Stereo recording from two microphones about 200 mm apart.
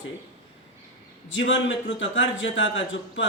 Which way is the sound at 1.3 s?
70° left (ahead or behind).